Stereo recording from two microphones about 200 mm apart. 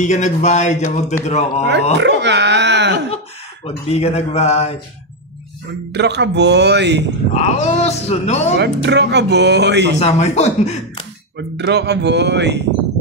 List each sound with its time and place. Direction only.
0.0 s speech: 35° left (ahead or behind)
2.0 s a sound: 60° right (ahead or behind)
3.6 s speech: 30° left (ahead or behind)
5.9 s speech: 60° right (ahead or behind)
7.3 s speech: 35° left (ahead or behind)
8.5 s speech: 60° right (ahead or behind)
9.9 s speech: 35° left (ahead or behind)
11.3 s speech: 60° right (ahead or behind)